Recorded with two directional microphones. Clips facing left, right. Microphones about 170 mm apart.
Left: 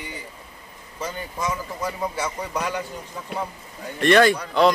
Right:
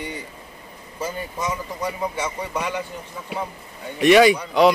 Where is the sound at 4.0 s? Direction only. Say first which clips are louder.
Right 3 dB; 5° right (ahead or behind).